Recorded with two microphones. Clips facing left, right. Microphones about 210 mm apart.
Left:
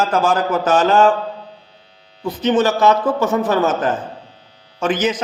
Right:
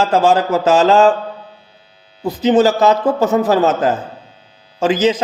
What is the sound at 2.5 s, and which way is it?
Speech, 35° right (ahead or behind).